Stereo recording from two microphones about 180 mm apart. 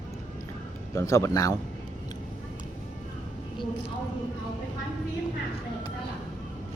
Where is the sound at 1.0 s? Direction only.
15° left (ahead or behind).